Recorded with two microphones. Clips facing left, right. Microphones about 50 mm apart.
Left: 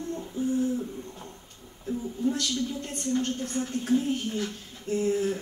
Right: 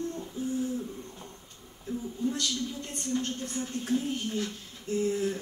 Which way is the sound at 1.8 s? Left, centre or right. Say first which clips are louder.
Left 3 dB; centre.